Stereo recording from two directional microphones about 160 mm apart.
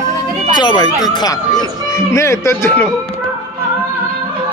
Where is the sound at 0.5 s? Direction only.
25° left (ahead or behind).